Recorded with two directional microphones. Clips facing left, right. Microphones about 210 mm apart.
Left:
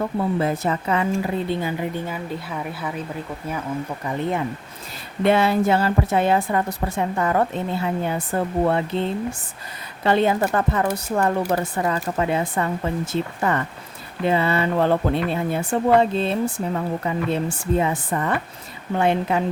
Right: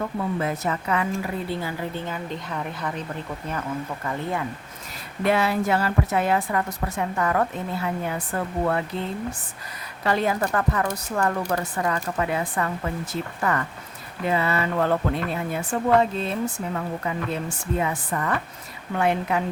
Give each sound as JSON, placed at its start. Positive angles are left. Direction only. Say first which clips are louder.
{"t": 0.2, "sound": "a woman's voice", "louder": "left 5 dB", "side_deg": 30}
{"t": 4.0, "sound": "a woman's voice", "louder": "left 5 dB", "side_deg": 20}